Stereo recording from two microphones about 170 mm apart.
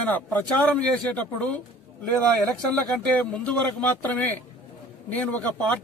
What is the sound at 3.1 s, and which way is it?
A man's voice, 5° left (ahead or behind).